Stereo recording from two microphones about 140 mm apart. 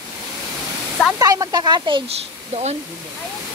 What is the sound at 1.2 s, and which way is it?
Speech, 25° right (ahead or behind).